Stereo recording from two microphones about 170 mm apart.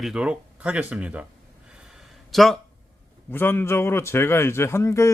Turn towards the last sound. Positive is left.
turn(degrees=15)  # may be behind; listen again after turning